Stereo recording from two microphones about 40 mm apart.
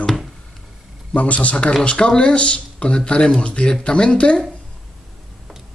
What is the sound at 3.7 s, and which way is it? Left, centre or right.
Speech, left.